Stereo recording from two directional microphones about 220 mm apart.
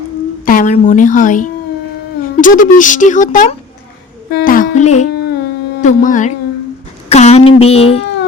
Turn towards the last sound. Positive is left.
turn(degrees=25)  # may be behind; listen again after turning